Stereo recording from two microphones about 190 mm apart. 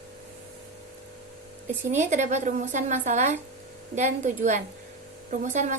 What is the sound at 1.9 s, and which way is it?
A woman's voice, 40° right (ahead or behind).